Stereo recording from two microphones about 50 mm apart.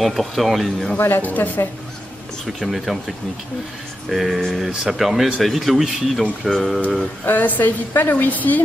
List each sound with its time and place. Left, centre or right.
0.0 s speech: centre
0.9 s speech: left
1.2 s a woman's voice: left
2.4 s speech: centre
4.4 s speech: centre
4.6 s speech: centre
7.2 s a woman's voice: left